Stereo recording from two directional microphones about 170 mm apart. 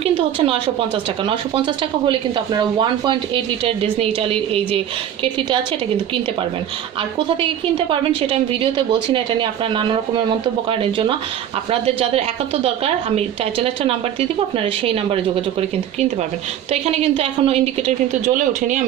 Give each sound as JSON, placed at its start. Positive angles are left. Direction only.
{"t": 1.2, "sound": "a woman's voice", "side_deg": -30}
{"t": 7.3, "sound": "a woman's voice", "side_deg": -30}
{"t": 16.8, "sound": "a woman's voice", "side_deg": -35}